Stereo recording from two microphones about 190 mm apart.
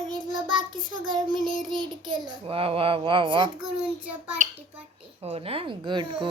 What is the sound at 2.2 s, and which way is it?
Speech, 30° right (ahead or behind).